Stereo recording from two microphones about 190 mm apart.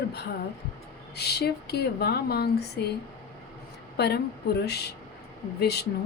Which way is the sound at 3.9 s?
60° left (ahead or behind).